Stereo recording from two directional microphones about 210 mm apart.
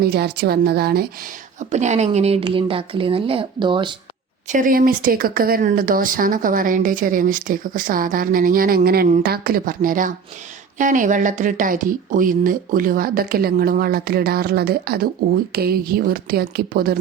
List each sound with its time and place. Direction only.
0.0 s speech: 50° right (ahead or behind)
1.5 s speech: 35° right (ahead or behind)
4.4 s speech: 40° right (ahead or behind)